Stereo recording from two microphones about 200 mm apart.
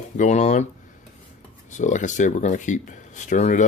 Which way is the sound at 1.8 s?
40° left (ahead or behind).